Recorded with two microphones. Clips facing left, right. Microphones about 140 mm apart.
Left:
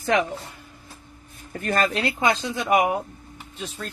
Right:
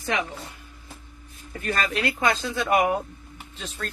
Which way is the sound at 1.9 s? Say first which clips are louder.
Left 1 dB; 25° left (ahead or behind).